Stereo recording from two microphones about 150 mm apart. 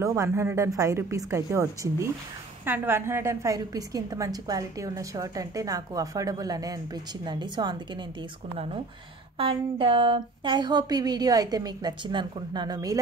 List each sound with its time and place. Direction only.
0.0 s a woman's voice: 20° right (ahead or behind)
9.4 s a woman's voice: 35° right (ahead or behind)